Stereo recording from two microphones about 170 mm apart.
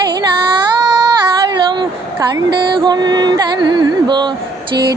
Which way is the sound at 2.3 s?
25° right (ahead or behind).